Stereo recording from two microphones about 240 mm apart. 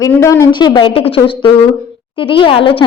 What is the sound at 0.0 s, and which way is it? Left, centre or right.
A woman's voice, centre.